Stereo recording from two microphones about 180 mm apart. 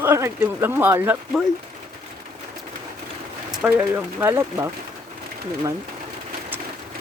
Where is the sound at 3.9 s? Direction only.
15° right (ahead or behind).